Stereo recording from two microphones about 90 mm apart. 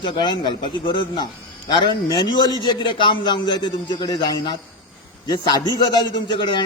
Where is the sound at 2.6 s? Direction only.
65° left (ahead or behind); by 4.3 s 50° left (ahead or behind).